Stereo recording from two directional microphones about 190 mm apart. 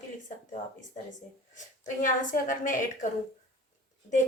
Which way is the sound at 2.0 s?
45° left (ahead or behind).